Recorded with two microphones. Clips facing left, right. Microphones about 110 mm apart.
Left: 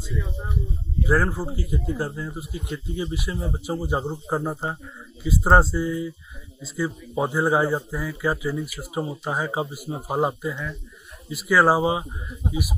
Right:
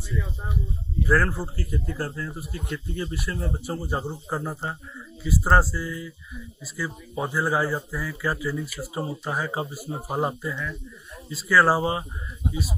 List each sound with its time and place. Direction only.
1.0 s a man's voice: 15° left (ahead or behind)